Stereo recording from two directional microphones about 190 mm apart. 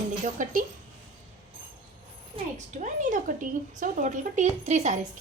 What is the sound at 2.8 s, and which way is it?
A woman's voice, 40° right (ahead or behind).